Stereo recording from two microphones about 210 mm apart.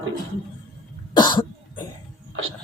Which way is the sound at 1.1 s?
20° left (ahead or behind).